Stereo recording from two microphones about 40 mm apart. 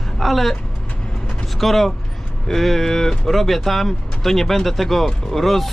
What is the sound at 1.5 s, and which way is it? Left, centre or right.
Speech, centre.